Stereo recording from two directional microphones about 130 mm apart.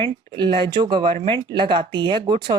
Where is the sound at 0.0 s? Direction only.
40° right (ahead or behind).